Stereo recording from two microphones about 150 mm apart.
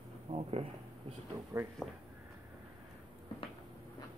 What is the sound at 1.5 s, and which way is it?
Speech, 20° right (ahead or behind).